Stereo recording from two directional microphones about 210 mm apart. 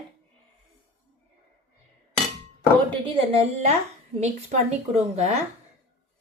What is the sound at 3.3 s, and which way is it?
Speech, 30° right (ahead or behind).